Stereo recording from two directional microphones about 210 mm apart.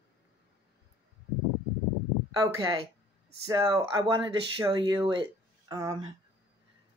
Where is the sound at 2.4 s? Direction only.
15° right (ahead or behind).